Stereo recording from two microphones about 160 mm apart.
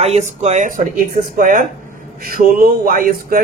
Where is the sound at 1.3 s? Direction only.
55° right (ahead or behind).